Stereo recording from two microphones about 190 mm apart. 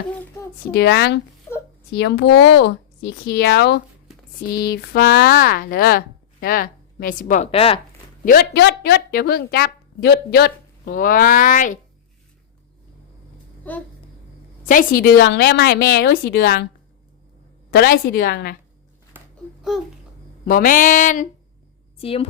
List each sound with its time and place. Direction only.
0.7 s a woman's voice: 60° left (ahead or behind); by 7.8 s 30° left (ahead or behind)
8.2 s a woman's voice: 50° left (ahead or behind)
13.7 s a sound: 10° left (ahead or behind)
14.6 s a woman's voice: 45° left (ahead or behind)
17.7 s a woman's voice: 50° left (ahead or behind)
19.7 s babbling: centre (ahead or behind)
20.5 s a woman's voice: 45° left (ahead or behind)
21.9 s a woman's voice: 30° left (ahead or behind)